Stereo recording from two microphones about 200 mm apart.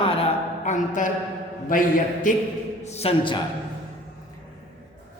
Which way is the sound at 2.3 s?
40° left (ahead or behind).